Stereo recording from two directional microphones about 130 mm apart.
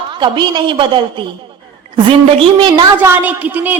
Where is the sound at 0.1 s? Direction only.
35° right (ahead or behind).